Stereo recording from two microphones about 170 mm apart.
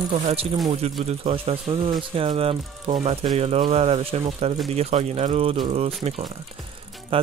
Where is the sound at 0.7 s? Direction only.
35° right (ahead or behind).